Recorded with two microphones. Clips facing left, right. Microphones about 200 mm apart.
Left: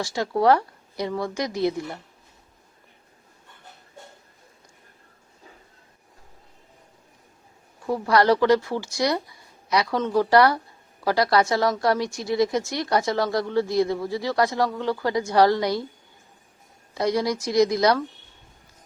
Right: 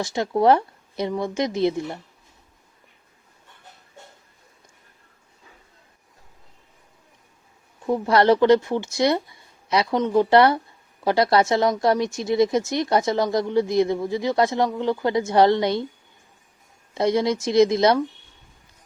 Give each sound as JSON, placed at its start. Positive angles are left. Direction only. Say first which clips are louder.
{"t": 0.0, "sound": "speech", "louder": "right 2 dB", "side_deg": -20}
{"t": 7.9, "sound": "speech", "louder": "right 2 dB", "side_deg": -20}
{"t": 16.9, "sound": "speech", "louder": "right 3 dB", "side_deg": -25}